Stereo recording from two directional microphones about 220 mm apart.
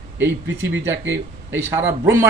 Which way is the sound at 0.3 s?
55° right (ahead or behind).